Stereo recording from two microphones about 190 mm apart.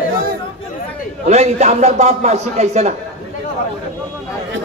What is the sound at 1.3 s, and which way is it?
A man's voice, 35° right (ahead or behind).